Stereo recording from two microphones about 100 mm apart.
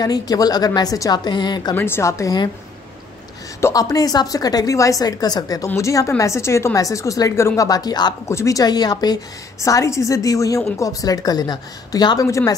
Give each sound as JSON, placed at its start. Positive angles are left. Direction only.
{"t": 0.0, "sound": "speech", "side_deg": 40}
{"t": 1.8, "sound": "speech", "side_deg": 25}
{"t": 3.6, "sound": "speech", "side_deg": 35}
{"t": 8.3, "sound": "speech", "side_deg": 30}